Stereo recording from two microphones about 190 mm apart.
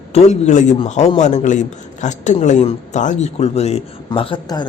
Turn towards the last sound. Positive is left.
turn(degrees=25)  # may be behind; listen again after turning